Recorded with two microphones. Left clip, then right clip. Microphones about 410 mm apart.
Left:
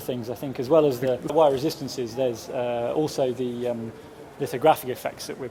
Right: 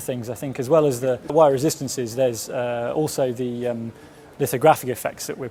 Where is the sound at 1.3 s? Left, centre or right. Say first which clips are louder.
Right 4 dB; right.